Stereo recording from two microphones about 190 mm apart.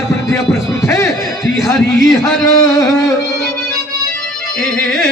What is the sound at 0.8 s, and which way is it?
Speech, 15° left (ahead or behind).